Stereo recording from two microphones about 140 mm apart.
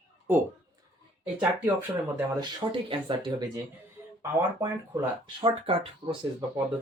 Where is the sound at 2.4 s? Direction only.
35° right (ahead or behind).